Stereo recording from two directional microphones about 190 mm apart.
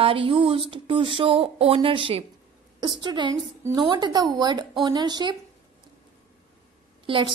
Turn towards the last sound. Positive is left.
turn(degrees=-25)  # may be behind; listen again after turning